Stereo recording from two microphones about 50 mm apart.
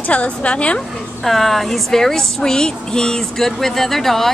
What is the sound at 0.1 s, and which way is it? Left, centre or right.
Speech, left.